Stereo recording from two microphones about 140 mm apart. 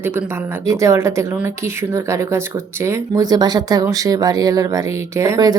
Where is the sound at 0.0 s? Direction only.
15° right (ahead or behind).